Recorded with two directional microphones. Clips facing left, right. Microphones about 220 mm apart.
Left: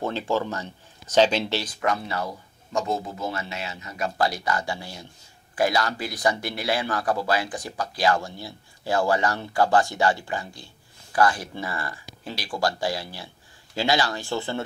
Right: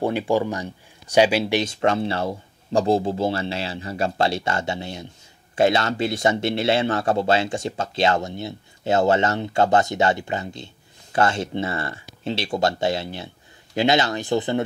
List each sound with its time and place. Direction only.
0.0 s speech: 15° right (ahead or behind)
1.6 s speech: 25° right (ahead or behind)